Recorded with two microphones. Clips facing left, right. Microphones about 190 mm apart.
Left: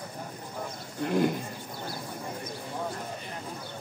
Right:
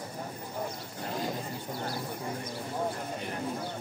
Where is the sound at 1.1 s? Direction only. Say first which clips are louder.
Left 9 dB; 60° left (ahead or behind).